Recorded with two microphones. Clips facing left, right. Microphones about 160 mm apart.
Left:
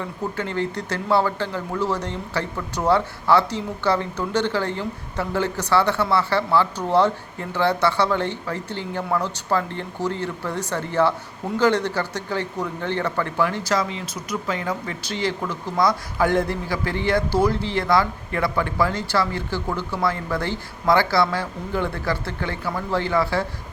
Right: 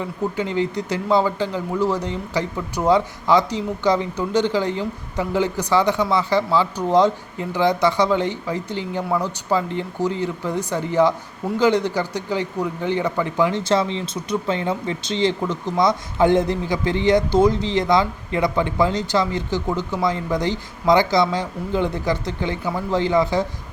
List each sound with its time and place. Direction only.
0.0 s a man's voice: 15° right (ahead or behind)